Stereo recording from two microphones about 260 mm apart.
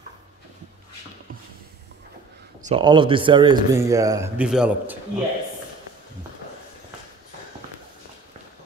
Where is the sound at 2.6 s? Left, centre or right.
Centre.